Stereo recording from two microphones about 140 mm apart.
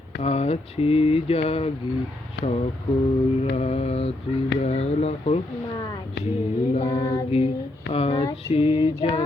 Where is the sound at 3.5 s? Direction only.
50° left (ahead or behind).